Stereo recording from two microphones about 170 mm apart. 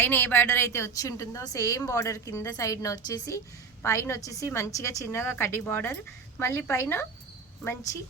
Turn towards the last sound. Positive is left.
turn(degrees=15)  # may be behind; listen again after turning